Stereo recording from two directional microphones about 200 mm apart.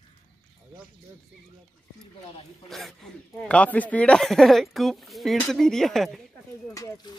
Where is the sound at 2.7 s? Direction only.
Centre (ahead or behind).